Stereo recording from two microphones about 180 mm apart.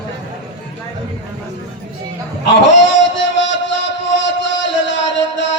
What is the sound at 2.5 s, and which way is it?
Music, 90° left.